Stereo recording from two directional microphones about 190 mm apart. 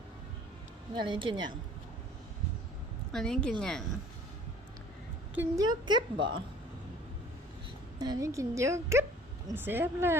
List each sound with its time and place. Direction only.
0.9 s a woman's voice: 25° right (ahead or behind)
3.1 s a woman's voice: 5° left (ahead or behind)
5.3 s speech: 10° right (ahead or behind)
5.6 s a woman's voice: 25° right (ahead or behind)
7.9 s speech: 20° right (ahead or behind)